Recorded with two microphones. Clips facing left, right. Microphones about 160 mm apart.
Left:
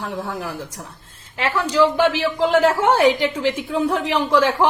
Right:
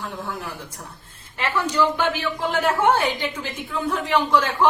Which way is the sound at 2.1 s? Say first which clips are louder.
Left 7 dB; 90° left.